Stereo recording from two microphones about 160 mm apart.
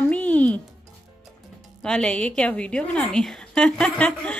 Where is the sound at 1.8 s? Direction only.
5° left (ahead or behind).